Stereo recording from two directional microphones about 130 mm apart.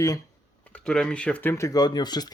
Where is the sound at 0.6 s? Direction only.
10° left (ahead or behind); by 2.3 s 30° left (ahead or behind).